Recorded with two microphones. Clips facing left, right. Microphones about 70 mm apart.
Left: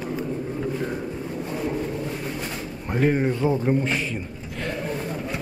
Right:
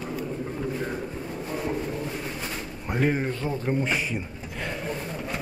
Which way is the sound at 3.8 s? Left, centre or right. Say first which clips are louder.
Left 2 dB; centre.